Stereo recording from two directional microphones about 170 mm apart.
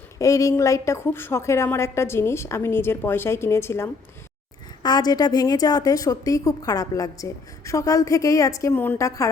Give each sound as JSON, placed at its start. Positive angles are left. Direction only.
{"t": 0.2, "sound": "a woman's voice", "side_deg": 20}